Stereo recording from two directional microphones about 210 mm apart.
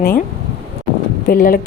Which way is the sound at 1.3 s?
45° left (ahead or behind).